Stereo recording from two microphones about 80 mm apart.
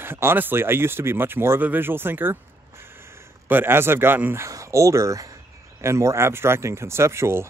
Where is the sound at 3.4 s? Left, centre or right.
Right.